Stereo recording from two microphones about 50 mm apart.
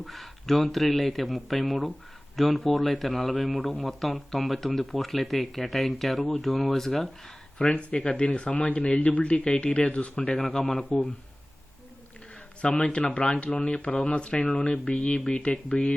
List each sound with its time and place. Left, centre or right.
0.0 s speech: centre
7.7 s speech: left
10.3 s speech: centre
12.7 s speech: left